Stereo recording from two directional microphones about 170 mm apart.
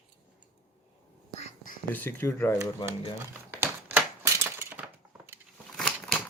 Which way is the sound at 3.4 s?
10° right (ahead or behind).